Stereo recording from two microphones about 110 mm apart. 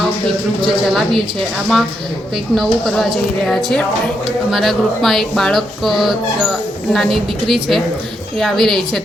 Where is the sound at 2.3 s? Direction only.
Centre (ahead or behind).